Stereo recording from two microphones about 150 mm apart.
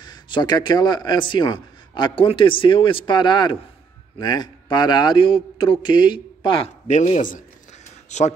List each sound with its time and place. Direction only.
0.0 s speech: 30° left (ahead or behind)
6.9 s speech: 50° left (ahead or behind)